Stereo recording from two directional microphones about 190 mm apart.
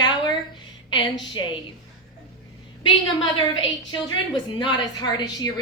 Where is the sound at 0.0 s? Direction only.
25° left (ahead or behind).